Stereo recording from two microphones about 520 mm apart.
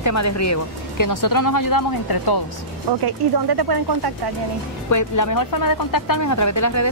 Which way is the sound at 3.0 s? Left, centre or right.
Right.